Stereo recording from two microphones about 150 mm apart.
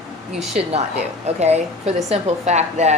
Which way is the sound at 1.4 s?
45° right (ahead or behind).